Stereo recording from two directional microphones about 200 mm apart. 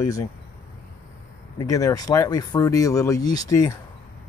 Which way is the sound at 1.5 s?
15° left (ahead or behind).